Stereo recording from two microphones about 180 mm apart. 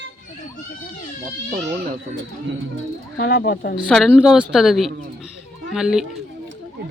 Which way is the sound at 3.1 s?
60° left (ahead or behind).